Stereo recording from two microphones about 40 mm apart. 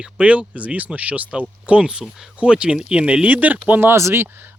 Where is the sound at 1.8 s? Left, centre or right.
Right.